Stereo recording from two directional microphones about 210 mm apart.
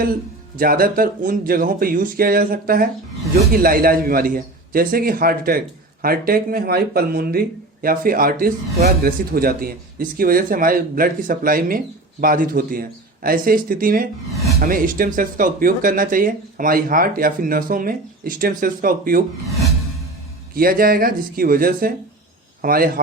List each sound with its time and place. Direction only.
0.0 s speech: 45° right (ahead or behind)
20.5 s speech: 45° right (ahead or behind)